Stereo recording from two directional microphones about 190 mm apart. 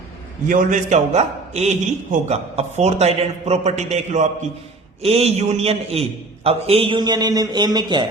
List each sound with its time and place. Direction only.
0.4 s a man's voice: 45° right (ahead or behind); by 8.0 s 25° right (ahead or behind)